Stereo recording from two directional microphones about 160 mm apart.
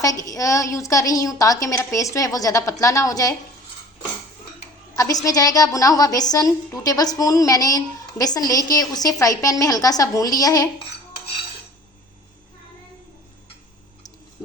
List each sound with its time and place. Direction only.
0.0 s a woman's voice: 20° left (ahead or behind)
4.9 s a woman's voice: 20° left (ahead or behind)